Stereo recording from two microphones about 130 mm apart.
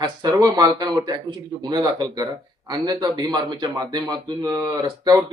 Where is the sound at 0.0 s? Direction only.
30° right (ahead or behind).